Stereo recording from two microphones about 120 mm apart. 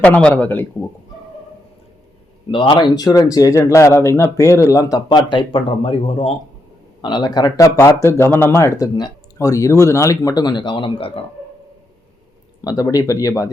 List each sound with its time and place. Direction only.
0.0 s a man's voice: 10° left (ahead or behind)
2.5 s speech: 45° left (ahead or behind)
7.0 s speech: 35° left (ahead or behind)
12.6 s speech: 30° left (ahead or behind)